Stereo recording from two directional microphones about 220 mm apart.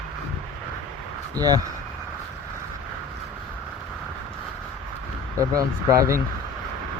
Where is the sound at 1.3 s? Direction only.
15° right (ahead or behind).